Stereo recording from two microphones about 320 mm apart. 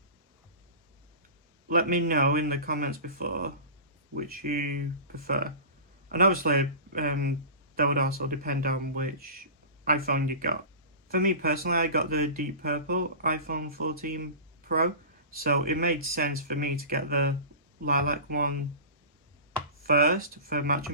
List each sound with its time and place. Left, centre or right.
1.6 s speech: right
19.8 s speech: right